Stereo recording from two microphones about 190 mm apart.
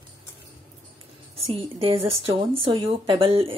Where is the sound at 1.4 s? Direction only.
30° right (ahead or behind).